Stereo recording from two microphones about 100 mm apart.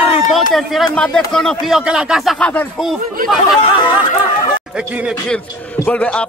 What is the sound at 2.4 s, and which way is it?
Speech, 15° left (ahead or behind).